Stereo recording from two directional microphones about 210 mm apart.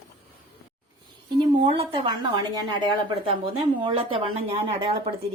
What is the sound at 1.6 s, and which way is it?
A woman's voice, 25° right (ahead or behind).